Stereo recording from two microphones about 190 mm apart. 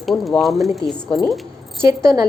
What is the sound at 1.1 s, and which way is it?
Speech, centre (ahead or behind).